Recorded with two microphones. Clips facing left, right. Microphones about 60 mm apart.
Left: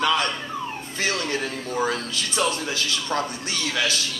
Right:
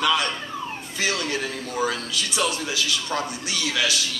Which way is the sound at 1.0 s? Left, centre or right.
Left.